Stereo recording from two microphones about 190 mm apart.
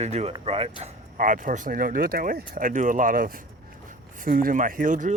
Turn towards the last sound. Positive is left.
turn(degrees=-45)  # may be behind; listen again after turning